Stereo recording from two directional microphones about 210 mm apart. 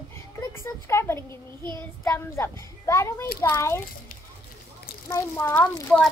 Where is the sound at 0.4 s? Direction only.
10° left (ahead or behind).